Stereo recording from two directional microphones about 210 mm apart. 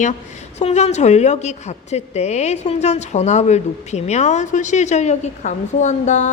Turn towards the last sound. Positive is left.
turn(degrees=35)  # may be behind; listen again after turning